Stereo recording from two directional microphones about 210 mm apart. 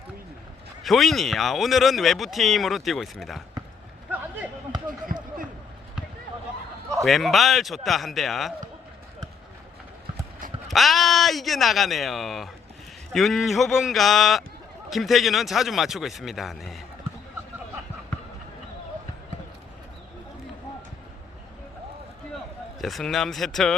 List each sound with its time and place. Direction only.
0.9 s speech: centre (ahead or behind)
5.0 s basketball bounce: 40° right (ahead or behind)
7.0 s speech: centre (ahead or behind)
10.7 s speech: centre (ahead or behind)
22.8 s speech: centre (ahead or behind)